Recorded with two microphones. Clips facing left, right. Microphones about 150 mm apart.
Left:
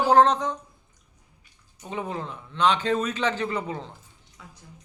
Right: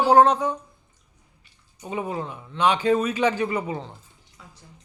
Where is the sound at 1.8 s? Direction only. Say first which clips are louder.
Right 3 dB; 10° right (ahead or behind).